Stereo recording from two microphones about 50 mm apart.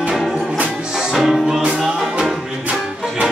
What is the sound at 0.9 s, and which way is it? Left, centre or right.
Music, centre.